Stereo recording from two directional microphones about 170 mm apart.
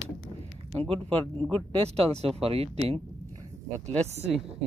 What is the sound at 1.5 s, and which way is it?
Speech, 35° right (ahead or behind).